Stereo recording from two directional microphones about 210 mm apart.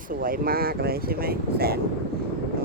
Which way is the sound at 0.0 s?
40° right (ahead or behind).